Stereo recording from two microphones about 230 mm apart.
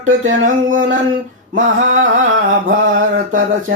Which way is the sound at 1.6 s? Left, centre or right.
Right.